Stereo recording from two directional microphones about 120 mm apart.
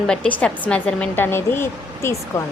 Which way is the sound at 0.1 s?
10° left (ahead or behind).